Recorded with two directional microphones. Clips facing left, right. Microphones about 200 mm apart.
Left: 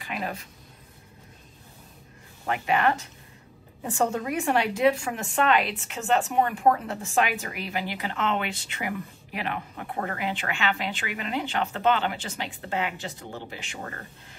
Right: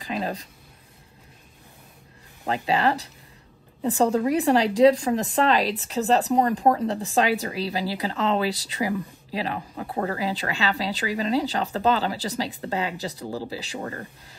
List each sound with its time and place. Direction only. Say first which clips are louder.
0.0 s speech: right 4 dB; 35° right (ahead or behind)
2.4 s speech: right 1 dB; 35° right (ahead or behind)